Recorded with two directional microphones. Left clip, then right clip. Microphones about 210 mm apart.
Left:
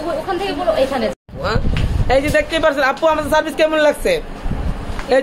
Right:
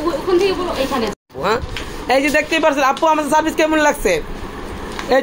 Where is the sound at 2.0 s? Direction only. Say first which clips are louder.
Even; 15° right (ahead or behind).